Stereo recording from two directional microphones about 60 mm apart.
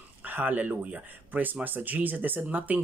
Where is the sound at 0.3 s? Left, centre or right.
Right.